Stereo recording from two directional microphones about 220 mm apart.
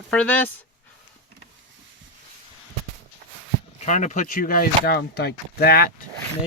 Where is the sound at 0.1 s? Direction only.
5° left (ahead or behind).